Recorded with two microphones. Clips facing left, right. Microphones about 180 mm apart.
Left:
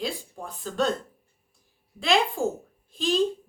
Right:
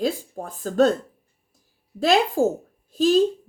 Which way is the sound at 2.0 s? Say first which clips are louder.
Right 5 dB; 40° right (ahead or behind).